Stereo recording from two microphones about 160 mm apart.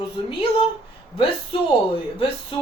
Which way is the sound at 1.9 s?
35° left (ahead or behind).